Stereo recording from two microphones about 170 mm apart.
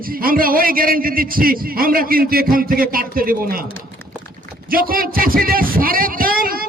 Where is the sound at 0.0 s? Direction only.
60° right (ahead or behind).